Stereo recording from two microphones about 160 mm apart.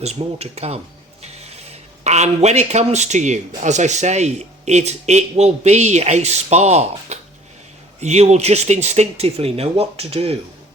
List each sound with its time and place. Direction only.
0.0 s speech: 40° right (ahead or behind)